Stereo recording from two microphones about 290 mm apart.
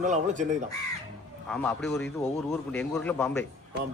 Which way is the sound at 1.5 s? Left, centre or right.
Centre.